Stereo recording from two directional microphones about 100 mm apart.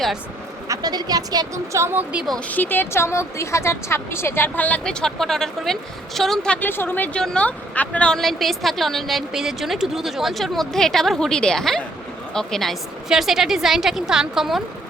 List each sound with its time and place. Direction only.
0.7 s speech: 40° right (ahead or behind)
1.8 s speech: 20° right (ahead or behind)
2.5 s a woman's voice: 20° left (ahead or behind)
6.6 s a woman's voice: 20° left (ahead or behind); by 14.6 s 5° right (ahead or behind)